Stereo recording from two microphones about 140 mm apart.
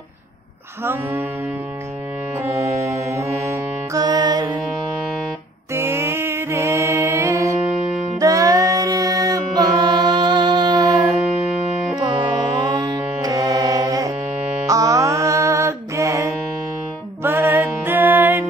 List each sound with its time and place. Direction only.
2.3 s saxophone: 20° right (ahead or behind)
3.9 s music: 30° right (ahead or behind)
5.8 s mantra: 20° right (ahead or behind)
8.2 s music: 25° right (ahead or behind)
12.8 s music: 25° right (ahead or behind)
14.4 s music: 10° right (ahead or behind)
14.7 s music: 25° right (ahead or behind)